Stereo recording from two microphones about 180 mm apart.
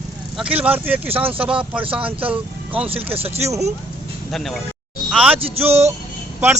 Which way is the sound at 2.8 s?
30° right (ahead or behind).